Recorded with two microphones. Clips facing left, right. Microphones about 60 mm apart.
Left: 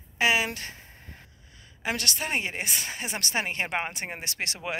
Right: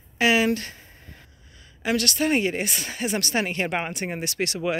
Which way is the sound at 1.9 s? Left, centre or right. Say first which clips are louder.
Right 7 dB; centre.